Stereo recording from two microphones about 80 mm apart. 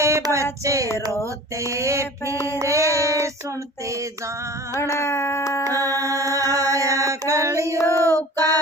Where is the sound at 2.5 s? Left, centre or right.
Right.